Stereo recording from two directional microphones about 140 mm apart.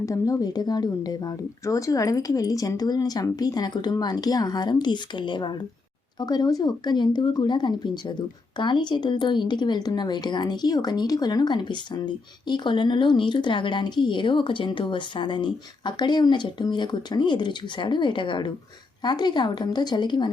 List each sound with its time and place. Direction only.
0.0 s speech: 25° left (ahead or behind)